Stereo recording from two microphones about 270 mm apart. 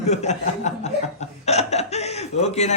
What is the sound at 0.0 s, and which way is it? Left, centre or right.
A man's voice, left.